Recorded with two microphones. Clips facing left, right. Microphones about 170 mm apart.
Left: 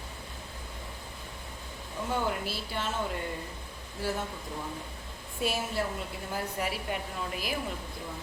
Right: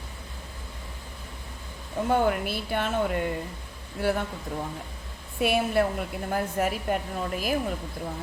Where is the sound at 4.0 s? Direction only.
65° right (ahead or behind).